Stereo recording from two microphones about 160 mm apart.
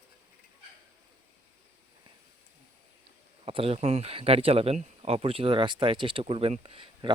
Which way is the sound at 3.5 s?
35° right (ahead or behind).